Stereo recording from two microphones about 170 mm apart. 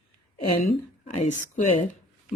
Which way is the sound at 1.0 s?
45° left (ahead or behind).